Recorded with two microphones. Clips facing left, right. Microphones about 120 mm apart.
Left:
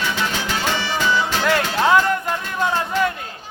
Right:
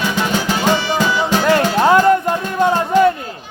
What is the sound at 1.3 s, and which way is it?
Music, 40° right (ahead or behind).